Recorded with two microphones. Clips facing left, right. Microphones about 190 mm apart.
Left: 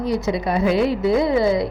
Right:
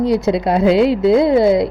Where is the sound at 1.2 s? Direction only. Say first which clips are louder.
Right 6 dB; 65° right (ahead or behind).